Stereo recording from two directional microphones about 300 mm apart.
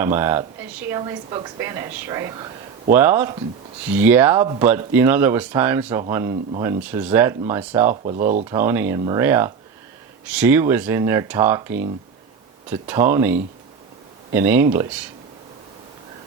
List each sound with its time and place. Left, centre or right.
0.0 s a woman's voice: centre
8.0 s speech: right
8.4 s a woman's voice: centre